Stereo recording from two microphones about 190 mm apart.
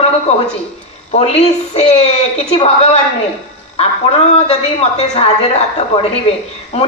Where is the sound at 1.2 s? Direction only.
35° left (ahead or behind).